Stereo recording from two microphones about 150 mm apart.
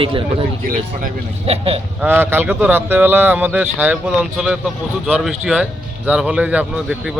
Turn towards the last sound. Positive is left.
turn(degrees=-5)  # may be behind; listen again after turning